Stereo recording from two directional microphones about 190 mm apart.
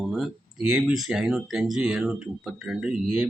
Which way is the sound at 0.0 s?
Centre (ahead or behind).